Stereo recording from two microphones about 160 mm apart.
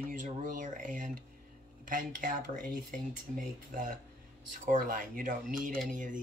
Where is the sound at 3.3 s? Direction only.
55° right (ahead or behind).